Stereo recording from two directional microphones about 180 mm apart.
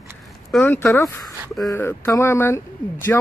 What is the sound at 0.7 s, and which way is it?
Speech, 15° left (ahead or behind).